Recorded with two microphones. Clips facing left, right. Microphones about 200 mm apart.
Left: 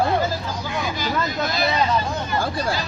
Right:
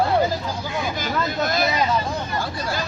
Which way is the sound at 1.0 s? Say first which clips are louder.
Right 1 dB; 50° right (ahead or behind).